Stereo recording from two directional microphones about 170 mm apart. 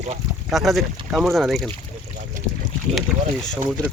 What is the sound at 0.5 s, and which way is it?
Speech, centre (ahead or behind).